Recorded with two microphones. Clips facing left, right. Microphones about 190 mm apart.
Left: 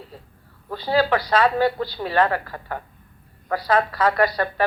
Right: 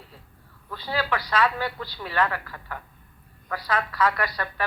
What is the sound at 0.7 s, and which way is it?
A man's voice, 30° left (ahead or behind).